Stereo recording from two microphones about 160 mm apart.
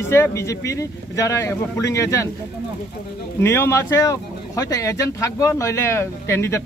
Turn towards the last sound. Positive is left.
turn(degrees=15)  # may be behind; listen again after turning